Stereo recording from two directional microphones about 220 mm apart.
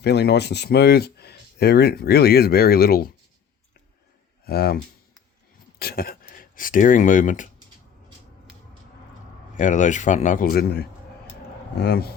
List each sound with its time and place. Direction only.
0.0 s speech: 50° left (ahead or behind)
4.4 s speech: 45° left (ahead or behind)
5.8 s speech: 45° left (ahead or behind)
9.6 s speech: 35° left (ahead or behind)